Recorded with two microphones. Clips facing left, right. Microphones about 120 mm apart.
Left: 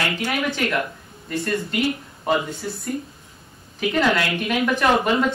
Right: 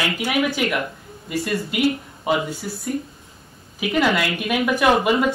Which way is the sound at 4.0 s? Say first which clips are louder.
Right 1 dB; 5° right (ahead or behind).